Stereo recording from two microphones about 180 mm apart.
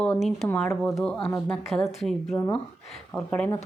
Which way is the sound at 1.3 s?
5° left (ahead or behind).